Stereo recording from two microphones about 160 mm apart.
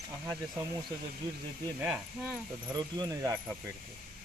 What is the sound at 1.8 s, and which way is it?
Speech, 5° right (ahead or behind).